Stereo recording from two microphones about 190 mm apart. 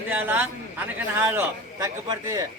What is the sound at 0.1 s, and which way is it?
A man's voice, 10° right (ahead or behind).